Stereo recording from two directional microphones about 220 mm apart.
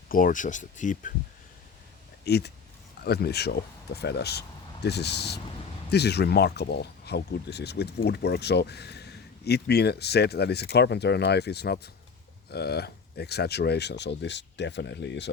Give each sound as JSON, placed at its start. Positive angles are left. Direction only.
{"t": 0.1, "sound": "speech", "side_deg": 40}
{"t": 2.2, "sound": "speech", "side_deg": 50}